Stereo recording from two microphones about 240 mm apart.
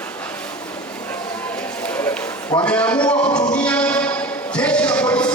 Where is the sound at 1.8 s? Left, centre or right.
Centre.